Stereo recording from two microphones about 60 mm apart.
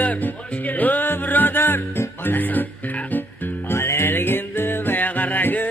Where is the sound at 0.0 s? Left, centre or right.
Left.